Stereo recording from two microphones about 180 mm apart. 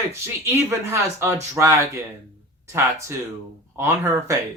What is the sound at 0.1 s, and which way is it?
Speech, 15° right (ahead or behind).